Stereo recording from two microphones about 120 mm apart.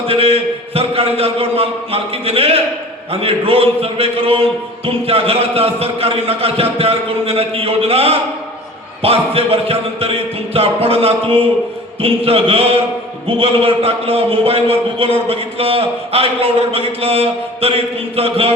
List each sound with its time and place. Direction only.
0.1 s a man's voice: 50° right (ahead or behind)